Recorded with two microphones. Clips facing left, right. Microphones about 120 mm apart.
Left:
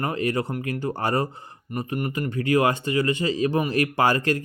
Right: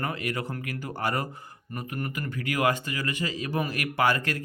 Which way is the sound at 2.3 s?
30° left (ahead or behind).